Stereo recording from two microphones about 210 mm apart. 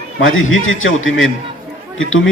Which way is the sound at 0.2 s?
70° left (ahead or behind).